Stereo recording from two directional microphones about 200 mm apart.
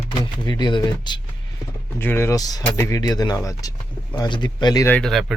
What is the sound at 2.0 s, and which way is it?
Speech, 10° left (ahead or behind).